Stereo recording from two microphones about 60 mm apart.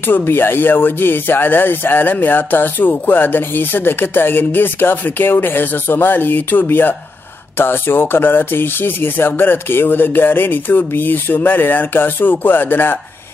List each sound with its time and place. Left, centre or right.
0.0 s speech: left